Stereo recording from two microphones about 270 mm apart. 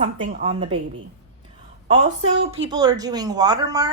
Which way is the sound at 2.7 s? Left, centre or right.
Centre.